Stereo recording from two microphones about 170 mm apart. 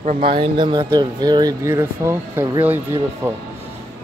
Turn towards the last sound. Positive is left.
turn(degrees=-10)  # may be behind; listen again after turning